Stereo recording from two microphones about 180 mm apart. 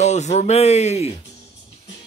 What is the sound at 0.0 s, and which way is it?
Speech, 40° left (ahead or behind).